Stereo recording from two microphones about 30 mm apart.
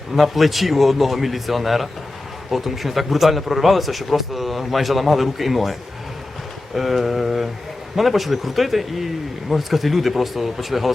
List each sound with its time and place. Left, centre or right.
0.2 s a man's voice: centre
6.7 s a sound: centre
7.9 s a man's voice: centre